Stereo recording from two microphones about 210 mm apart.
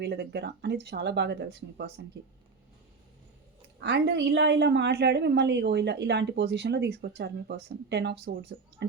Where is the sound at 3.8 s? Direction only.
55° right (ahead or behind).